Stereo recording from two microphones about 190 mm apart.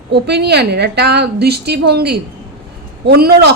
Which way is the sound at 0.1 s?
60° right (ahead or behind).